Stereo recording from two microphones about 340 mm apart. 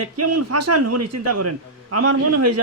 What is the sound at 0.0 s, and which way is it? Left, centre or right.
A man's voice, right.